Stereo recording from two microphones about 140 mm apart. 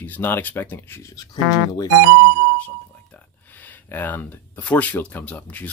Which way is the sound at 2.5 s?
10° left (ahead or behind).